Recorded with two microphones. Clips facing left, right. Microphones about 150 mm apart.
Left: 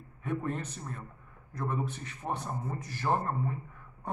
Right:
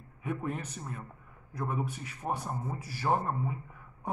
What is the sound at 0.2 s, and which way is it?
A man's voice, 10° right (ahead or behind).